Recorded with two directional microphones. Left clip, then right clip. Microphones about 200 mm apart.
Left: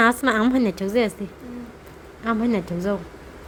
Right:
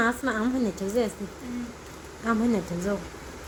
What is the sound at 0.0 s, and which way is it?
Speech, 30° left (ahead or behind).